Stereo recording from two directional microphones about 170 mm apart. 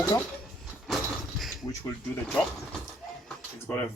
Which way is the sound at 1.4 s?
Centre (ahead or behind).